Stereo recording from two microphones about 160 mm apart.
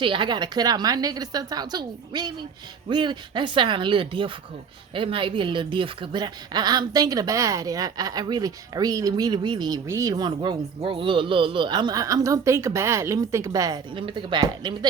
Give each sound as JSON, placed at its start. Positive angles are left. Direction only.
{"t": 0.0, "sound": "a woman's voice", "side_deg": -30}